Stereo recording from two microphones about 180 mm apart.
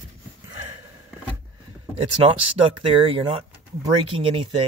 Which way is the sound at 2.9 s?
30° right (ahead or behind).